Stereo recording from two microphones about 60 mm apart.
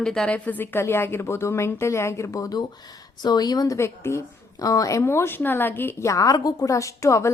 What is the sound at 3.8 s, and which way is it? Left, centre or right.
Speech, left.